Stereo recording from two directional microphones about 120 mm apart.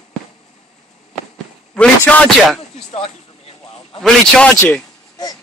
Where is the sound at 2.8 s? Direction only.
65° left (ahead or behind).